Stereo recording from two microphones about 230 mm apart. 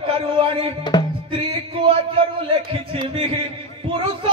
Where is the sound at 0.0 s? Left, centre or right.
Right.